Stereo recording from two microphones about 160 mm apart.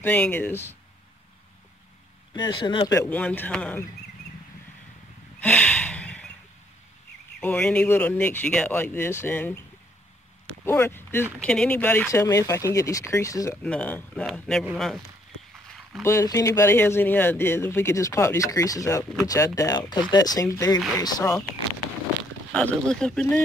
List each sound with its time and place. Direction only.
0.0 s speech: 10° left (ahead or behind)
2.3 s speech: 25° left (ahead or behind)
3.1 s speech: 10° left (ahead or behind)
5.4 s snort: 10° left (ahead or behind)
7.3 s speech: 10° left (ahead or behind)
10.6 s speech: 15° left (ahead or behind)
13.6 s speech: 10° left (ahead or behind)
16.0 s speech: 20° left (ahead or behind)
22.5 s speech: 5° left (ahead or behind)